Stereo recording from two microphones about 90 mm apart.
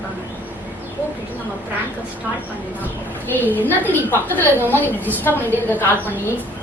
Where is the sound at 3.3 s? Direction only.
20° left (ahead or behind).